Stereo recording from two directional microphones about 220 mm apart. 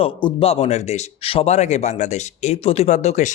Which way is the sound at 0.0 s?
25° left (ahead or behind).